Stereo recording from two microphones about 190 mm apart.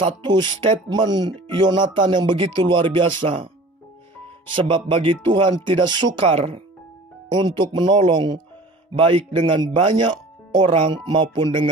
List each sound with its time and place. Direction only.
0.0 s speech: 25° right (ahead or behind)
4.6 s speech: 25° right (ahead or behind)